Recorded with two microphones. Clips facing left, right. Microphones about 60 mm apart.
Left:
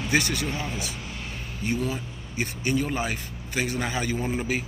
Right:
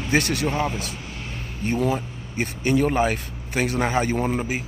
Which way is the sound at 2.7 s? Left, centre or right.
Right.